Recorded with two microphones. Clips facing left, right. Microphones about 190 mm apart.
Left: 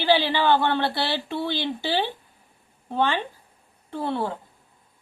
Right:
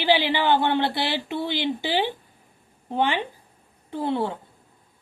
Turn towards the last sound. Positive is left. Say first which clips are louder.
# right 2 dB
turn(degrees=-15)  # may be behind; listen again after turning